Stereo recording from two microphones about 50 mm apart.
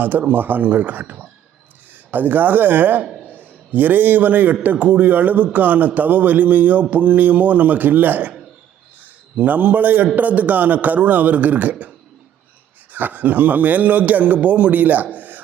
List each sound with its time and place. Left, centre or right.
0.0 s a man's voice: right
9.3 s speech: right
12.9 s speech: right